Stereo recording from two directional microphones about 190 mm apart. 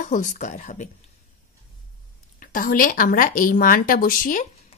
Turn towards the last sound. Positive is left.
turn(degrees=45)  # may be behind; listen again after turning